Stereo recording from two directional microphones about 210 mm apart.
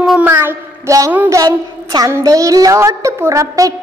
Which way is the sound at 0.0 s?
5° right (ahead or behind).